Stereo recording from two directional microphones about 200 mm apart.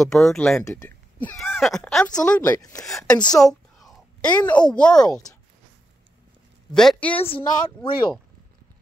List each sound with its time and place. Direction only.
0.0 s speech: centre (ahead or behind)
2.5 s speech: 20° left (ahead or behind)
2.8 s speech: centre (ahead or behind)
6.7 s speech: 5° left (ahead or behind)
7.2 s speech: 25° left (ahead or behind)